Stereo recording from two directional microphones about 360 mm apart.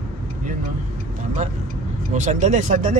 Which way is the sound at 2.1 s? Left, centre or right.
Centre.